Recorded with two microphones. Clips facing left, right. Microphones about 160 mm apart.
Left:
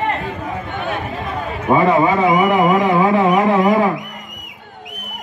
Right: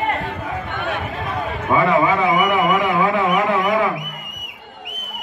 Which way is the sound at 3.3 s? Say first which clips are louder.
Left 4 dB; 40° left (ahead or behind).